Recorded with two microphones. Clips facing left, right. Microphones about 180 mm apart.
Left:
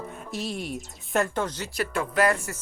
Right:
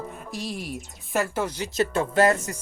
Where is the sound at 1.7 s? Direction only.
25° right (ahead or behind).